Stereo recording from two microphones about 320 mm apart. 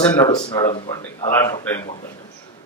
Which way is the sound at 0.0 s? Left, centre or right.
Centre.